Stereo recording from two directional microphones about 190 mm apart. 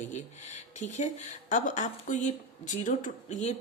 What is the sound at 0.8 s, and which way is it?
A woman's voice, 40° left (ahead or behind).